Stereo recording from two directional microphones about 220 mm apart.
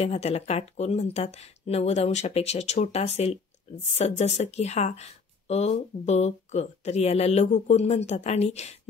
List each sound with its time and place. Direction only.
0.0 s speech: 30° left (ahead or behind)